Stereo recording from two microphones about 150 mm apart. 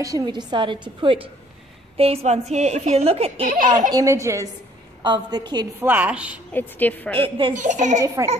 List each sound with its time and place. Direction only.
0.0 s a woman's voice: 25° right (ahead or behind)
3.9 s a woman's voice: 20° right (ahead or behind)
5.0 s a woman's voice: 30° right (ahead or behind)
5.8 s a woman's voice: 10° right (ahead or behind)
6.5 s a woman's voice: 15° left (ahead or behind)
7.2 s a woman's voice: 35° right (ahead or behind)
7.5 s a child's voice: 55° right (ahead or behind)